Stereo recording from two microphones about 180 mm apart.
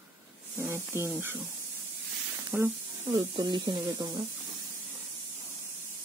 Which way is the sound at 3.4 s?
25° right (ahead or behind).